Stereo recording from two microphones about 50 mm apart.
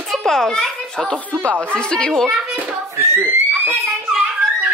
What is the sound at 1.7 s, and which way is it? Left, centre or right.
Speech, centre.